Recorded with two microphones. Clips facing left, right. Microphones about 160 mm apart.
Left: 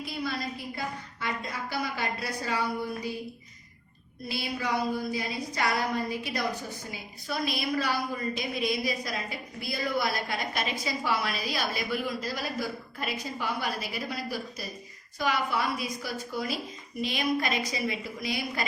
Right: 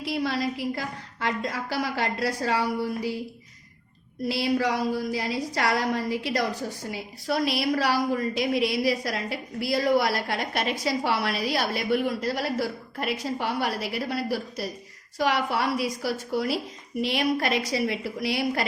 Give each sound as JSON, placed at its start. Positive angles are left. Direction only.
{"t": 0.0, "sound": "a woman's voice", "side_deg": -85}
{"t": 4.3, "sound": "a woman's voice", "side_deg": -90}